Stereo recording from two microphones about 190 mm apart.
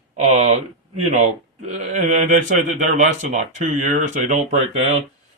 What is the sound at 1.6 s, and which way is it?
Speech, 35° right (ahead or behind).